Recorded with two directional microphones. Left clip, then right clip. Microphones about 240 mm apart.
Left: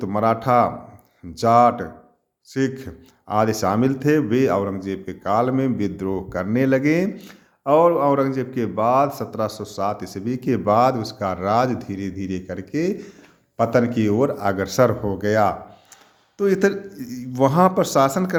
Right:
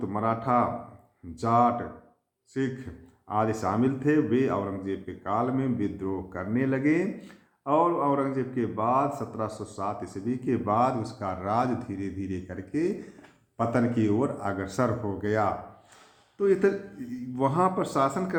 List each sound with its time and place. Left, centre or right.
0.0 s a man's voice: left